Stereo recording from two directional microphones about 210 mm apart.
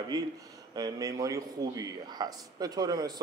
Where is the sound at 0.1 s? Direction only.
15° right (ahead or behind).